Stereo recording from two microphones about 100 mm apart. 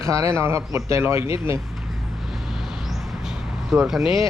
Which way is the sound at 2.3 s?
5° right (ahead or behind).